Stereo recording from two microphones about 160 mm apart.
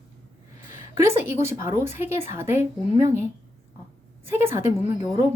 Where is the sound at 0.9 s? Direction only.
15° right (ahead or behind).